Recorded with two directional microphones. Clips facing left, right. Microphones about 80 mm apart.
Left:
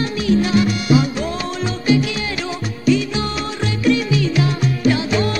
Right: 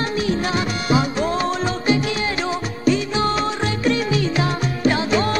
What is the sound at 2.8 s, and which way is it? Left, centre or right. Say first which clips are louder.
Music: left 1 dB; right.